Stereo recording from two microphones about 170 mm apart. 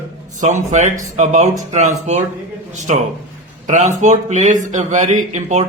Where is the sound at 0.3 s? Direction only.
45° right (ahead or behind).